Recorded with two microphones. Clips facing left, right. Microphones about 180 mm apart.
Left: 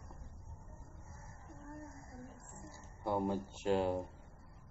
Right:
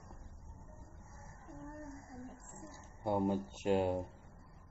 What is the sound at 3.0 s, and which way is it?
Speech, 20° right (ahead or behind).